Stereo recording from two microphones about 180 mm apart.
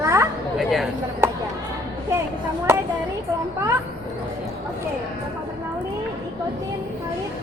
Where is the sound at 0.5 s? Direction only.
Centre (ahead or behind).